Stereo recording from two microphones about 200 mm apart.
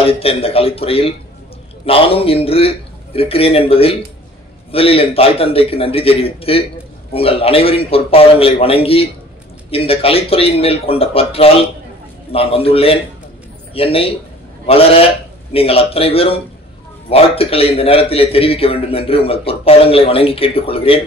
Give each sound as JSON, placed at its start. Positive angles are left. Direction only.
{"t": 0.0, "sound": "a man's voice", "side_deg": 30}